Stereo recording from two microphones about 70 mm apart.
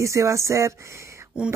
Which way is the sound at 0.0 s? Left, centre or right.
Right.